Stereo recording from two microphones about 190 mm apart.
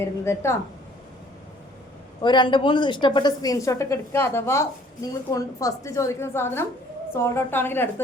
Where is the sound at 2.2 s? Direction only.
25° left (ahead or behind).